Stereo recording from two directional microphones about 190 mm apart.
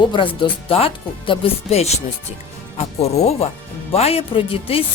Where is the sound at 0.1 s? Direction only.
25° left (ahead or behind).